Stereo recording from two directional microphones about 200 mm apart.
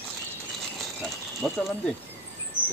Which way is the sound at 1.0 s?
5° left (ahead or behind).